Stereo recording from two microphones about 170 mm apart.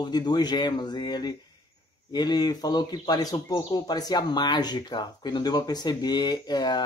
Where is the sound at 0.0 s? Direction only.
25° left (ahead or behind).